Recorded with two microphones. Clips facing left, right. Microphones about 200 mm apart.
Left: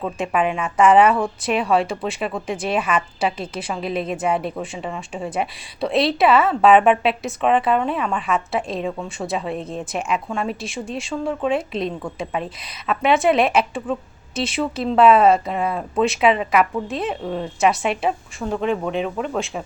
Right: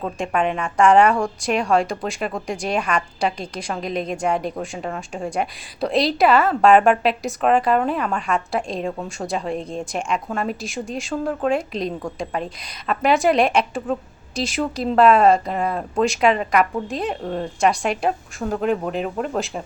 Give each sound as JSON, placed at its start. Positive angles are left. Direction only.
{"t": 0.0, "sound": "a woman's voice", "side_deg": 5}